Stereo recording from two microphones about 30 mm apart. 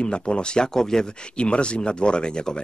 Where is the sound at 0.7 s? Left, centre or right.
Centre.